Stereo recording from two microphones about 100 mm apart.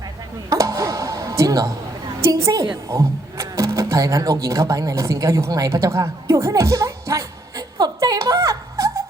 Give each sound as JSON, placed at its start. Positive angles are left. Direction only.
{"t": 0.5, "sound": "music", "side_deg": -35}
{"t": 2.2, "sound": "a woman's voice", "side_deg": -35}